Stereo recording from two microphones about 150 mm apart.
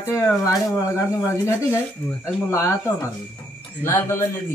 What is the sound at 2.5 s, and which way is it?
Speech, 20° left (ahead or behind).